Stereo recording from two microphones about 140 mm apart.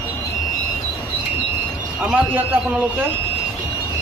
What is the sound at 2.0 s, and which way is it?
Speech, 5° right (ahead or behind).